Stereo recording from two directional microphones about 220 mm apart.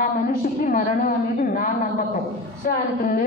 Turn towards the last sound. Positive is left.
turn(degrees=40)  # may be behind; listen again after turning